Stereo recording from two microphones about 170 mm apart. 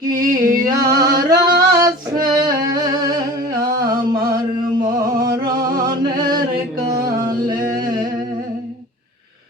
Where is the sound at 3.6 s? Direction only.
20° right (ahead or behind).